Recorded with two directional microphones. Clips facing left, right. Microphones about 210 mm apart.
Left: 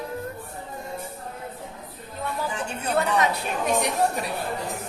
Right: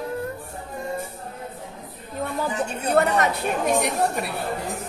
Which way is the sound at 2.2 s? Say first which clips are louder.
Right 3 dB; 50° right (ahead or behind).